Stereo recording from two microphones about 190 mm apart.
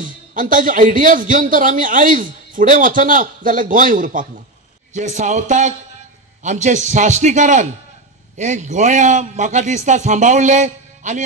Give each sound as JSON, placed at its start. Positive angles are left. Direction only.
{"t": 0.0, "sound": "a man's voice", "side_deg": -45}